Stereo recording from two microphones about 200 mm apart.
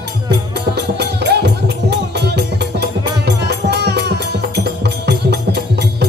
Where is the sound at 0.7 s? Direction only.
55° right (ahead or behind).